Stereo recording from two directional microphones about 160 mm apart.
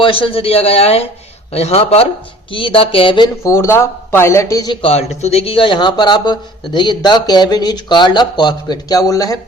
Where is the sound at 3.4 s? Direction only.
15° left (ahead or behind).